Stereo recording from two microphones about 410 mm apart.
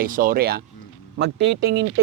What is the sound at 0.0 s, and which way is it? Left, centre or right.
Speech, centre.